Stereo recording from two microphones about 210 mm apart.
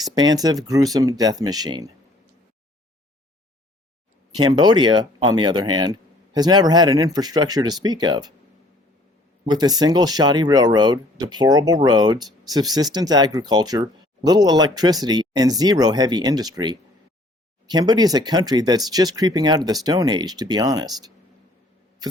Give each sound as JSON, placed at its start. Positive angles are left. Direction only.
{"t": 0.0, "sound": "speech", "side_deg": -20}
{"t": 4.4, "sound": "speech", "side_deg": -20}
{"t": 9.5, "sound": "speech", "side_deg": -20}